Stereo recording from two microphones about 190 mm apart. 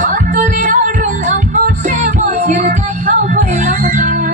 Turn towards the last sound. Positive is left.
turn(degrees=-40)  # may be behind; listen again after turning